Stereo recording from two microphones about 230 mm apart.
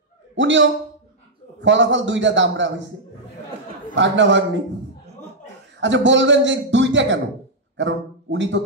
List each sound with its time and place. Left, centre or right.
0.4 s a man's voice: right
3.9 s a man's voice: right
5.8 s a man's voice: right